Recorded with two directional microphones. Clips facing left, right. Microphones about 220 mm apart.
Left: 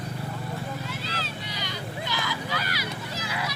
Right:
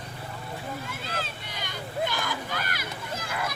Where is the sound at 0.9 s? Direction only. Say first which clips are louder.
Left 1 dB; 50° right (ahead or behind).